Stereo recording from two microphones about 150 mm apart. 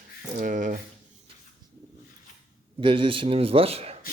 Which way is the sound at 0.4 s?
60° right (ahead or behind).